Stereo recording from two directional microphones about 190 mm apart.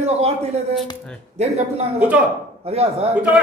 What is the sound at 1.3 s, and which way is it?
Speech, 35° right (ahead or behind).